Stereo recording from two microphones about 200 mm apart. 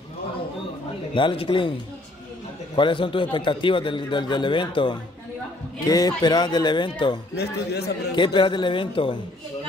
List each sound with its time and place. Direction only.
1.1 s a man's voice: 25° left (ahead or behind)
7.3 s a man's voice: 55° left (ahead or behind)
8.2 s a man's voice: 25° left (ahead or behind)